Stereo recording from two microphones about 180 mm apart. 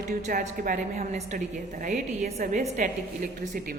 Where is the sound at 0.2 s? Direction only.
50° right (ahead or behind).